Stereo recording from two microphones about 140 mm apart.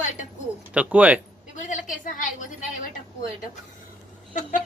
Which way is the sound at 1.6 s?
60° left (ahead or behind).